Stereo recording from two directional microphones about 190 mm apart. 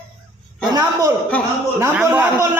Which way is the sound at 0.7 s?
20° right (ahead or behind).